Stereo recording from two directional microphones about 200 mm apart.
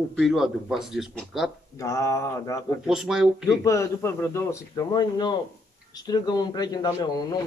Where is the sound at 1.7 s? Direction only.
15° left (ahead or behind).